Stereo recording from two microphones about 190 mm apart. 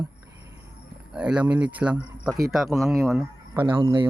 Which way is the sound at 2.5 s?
Centre (ahead or behind).